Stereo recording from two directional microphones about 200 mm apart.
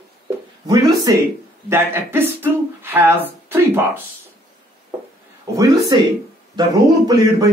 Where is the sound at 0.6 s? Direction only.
15° right (ahead or behind).